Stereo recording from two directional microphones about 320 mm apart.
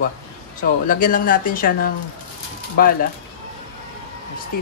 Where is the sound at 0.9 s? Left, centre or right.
Left.